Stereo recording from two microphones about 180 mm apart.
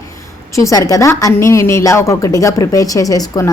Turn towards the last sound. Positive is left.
turn(degrees=20)  # may be behind; listen again after turning